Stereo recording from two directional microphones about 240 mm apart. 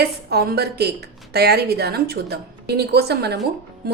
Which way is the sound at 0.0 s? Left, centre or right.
Right.